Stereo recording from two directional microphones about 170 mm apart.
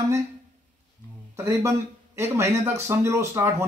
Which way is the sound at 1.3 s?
15° right (ahead or behind).